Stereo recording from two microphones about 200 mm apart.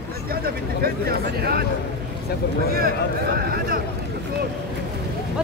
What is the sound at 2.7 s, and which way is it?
Speech, 50° right (ahead or behind).